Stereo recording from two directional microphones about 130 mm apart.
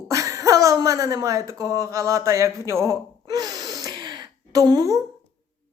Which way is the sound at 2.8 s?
30° right (ahead or behind).